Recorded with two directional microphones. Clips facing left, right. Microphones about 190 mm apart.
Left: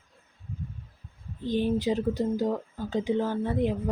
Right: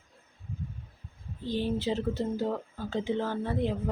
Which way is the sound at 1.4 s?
15° left (ahead or behind).